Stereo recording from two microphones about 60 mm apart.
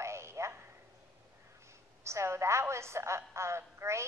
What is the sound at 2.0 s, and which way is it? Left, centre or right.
A woman's voice, right.